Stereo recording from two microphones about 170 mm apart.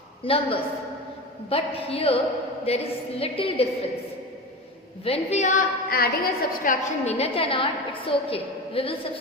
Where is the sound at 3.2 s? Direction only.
35° left (ahead or behind).